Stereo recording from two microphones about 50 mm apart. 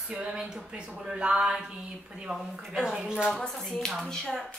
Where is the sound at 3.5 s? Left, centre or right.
Centre.